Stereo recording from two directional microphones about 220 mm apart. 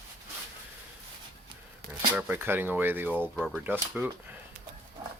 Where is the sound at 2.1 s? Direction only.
10° right (ahead or behind).